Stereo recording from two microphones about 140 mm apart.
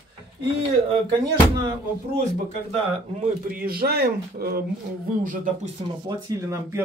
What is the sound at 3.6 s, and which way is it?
Speech, 90° right.